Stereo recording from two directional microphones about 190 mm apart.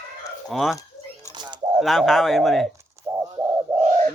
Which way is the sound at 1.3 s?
25° right (ahead or behind).